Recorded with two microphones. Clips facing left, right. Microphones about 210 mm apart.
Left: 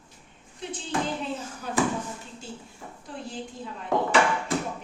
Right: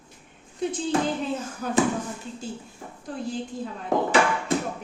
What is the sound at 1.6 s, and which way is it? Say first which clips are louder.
Speech: right 7 dB; 45° right (ahead or behind).